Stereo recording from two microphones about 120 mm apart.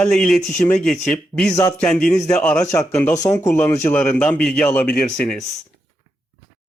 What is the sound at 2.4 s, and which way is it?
Speech, 10° left (ahead or behind).